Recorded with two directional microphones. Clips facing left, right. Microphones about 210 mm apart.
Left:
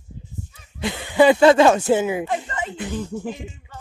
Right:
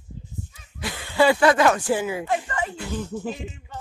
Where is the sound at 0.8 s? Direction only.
20° left (ahead or behind).